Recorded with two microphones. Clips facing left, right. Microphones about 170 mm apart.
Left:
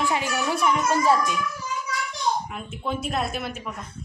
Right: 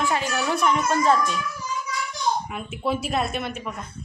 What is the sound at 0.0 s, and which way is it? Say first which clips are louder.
Speech: right 1 dB; 15° left (ahead or behind).